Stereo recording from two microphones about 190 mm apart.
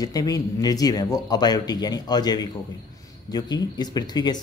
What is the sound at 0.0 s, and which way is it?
Speech, 20° left (ahead or behind).